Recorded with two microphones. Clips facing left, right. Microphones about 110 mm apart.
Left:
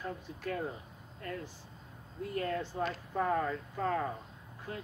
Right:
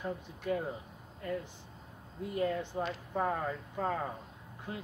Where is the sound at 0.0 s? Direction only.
20° right (ahead or behind).